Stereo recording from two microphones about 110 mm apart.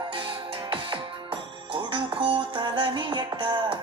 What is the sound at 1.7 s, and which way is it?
Music, 50° right (ahead or behind).